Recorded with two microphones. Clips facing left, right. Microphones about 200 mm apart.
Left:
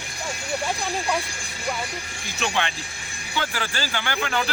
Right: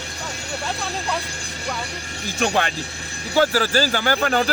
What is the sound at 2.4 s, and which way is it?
Speech, 45° right (ahead or behind).